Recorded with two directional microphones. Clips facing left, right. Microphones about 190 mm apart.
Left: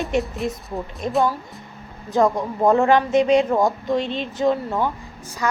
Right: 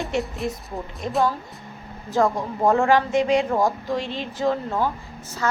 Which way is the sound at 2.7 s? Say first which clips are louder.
Left 2 dB; 20° left (ahead or behind).